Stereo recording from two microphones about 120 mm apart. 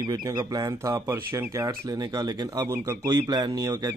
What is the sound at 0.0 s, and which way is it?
Speech, 35° right (ahead or behind).